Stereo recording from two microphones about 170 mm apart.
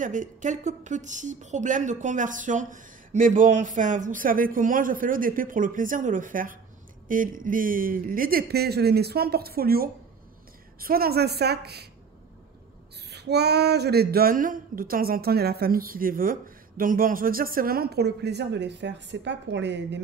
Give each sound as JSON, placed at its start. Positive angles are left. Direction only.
{"t": 0.0, "sound": "speech", "side_deg": -50}
{"t": 13.1, "sound": "speech", "side_deg": -75}